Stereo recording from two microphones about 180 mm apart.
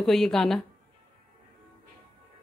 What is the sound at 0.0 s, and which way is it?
Speech, centre (ahead or behind).